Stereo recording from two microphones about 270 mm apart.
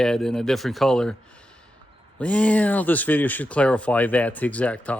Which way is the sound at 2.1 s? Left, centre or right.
Centre.